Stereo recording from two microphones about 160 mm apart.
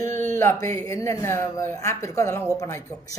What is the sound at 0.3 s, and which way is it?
A woman's voice, 20° left (ahead or behind).